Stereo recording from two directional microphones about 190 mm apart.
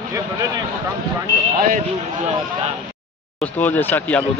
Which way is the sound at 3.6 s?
10° left (ahead or behind).